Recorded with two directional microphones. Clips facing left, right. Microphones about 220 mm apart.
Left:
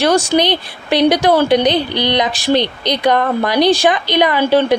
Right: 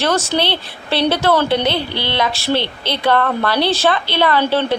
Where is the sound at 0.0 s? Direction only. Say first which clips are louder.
Left 5 dB; 15° left (ahead or behind).